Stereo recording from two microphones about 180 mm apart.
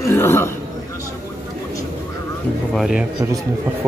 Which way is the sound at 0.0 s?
15° left (ahead or behind).